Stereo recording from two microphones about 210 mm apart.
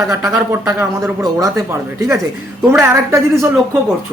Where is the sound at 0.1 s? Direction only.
15° right (ahead or behind).